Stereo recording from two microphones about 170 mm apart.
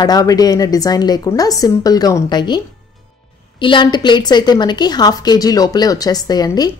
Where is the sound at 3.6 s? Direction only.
30° left (ahead or behind).